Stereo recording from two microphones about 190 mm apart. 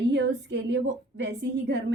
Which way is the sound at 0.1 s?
65° right (ahead or behind).